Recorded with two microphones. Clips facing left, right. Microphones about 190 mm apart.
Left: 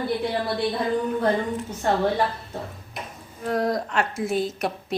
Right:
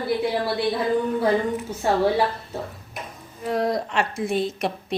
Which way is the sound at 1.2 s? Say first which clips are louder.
Right 2 dB; 10° right (ahead or behind).